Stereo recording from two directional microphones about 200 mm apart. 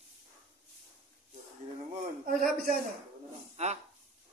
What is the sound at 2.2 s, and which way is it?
Speech, 45° right (ahead or behind).